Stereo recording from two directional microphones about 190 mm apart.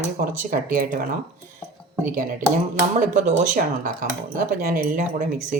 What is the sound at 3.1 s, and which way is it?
Speech, 40° right (ahead or behind).